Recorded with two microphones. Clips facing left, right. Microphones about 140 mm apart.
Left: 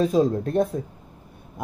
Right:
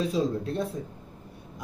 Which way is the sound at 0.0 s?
50° left (ahead or behind).